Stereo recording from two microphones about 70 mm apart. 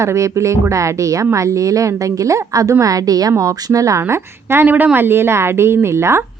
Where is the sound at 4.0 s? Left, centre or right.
Right.